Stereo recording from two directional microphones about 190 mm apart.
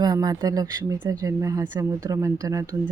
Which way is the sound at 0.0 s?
20° right (ahead or behind).